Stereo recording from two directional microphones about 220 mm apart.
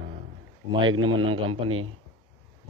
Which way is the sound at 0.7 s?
20° right (ahead or behind).